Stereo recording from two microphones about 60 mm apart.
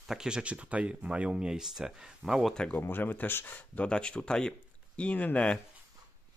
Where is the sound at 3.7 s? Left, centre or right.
Centre.